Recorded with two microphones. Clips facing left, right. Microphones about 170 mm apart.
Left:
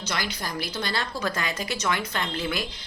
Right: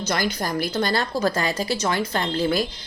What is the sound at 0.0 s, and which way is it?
A woman's voice, 45° right (ahead or behind).